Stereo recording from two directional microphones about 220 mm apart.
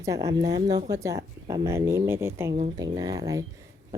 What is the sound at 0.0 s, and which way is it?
Speech, 15° right (ahead or behind).